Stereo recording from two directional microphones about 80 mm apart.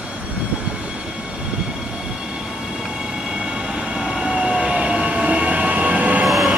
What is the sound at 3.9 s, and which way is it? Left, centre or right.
Train, centre.